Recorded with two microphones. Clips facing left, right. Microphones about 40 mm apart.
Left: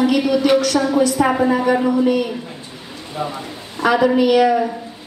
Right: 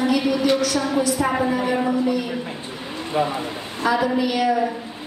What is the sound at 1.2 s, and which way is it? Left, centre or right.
Speech, left.